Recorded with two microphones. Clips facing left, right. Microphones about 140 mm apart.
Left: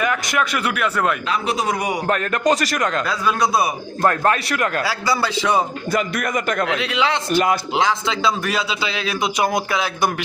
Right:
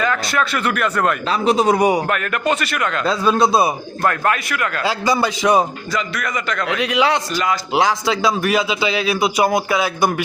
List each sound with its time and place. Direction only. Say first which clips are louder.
0.0 s speech: right 1 dB; 15° left (ahead or behind)
1.3 s speech: right 6 dB; 30° right (ahead or behind)
2.0 s a man's voice: left 1 dB; 35° left (ahead or behind)
3.1 s speech: right 7 dB; 25° right (ahead or behind)
4.8 s speech: right 3 dB; 20° right (ahead or behind)
5.9 s a man's voice: left 2 dB; 50° left (ahead or behind)
6.7 s speech: right 3 dB; 15° right (ahead or behind)